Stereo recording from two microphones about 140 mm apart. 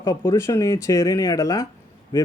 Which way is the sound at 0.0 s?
25° left (ahead or behind).